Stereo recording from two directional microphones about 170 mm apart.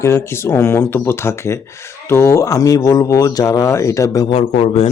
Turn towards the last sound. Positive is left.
turn(degrees=35)  # may be behind; listen again after turning